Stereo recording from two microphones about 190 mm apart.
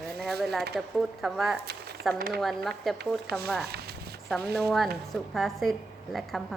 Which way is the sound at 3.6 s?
55° right (ahead or behind).